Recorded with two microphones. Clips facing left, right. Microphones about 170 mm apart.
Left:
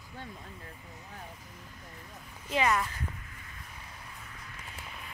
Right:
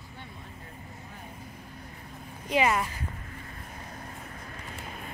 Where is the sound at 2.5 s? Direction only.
15° right (ahead or behind).